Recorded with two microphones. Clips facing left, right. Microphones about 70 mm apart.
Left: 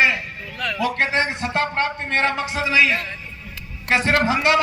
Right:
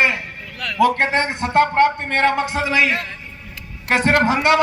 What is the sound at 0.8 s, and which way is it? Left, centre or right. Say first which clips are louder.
A man's voice: right 5 dB; right.